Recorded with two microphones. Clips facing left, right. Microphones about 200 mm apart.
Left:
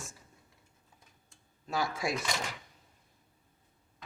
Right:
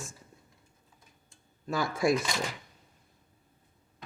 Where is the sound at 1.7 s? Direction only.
50° right (ahead or behind).